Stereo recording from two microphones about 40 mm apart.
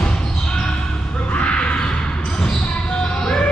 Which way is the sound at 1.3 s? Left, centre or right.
Left.